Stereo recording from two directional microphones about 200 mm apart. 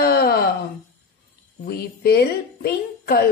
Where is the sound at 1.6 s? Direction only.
50° left (ahead or behind).